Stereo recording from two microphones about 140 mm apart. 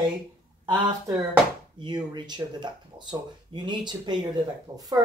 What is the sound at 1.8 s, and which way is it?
Speech, 30° right (ahead or behind).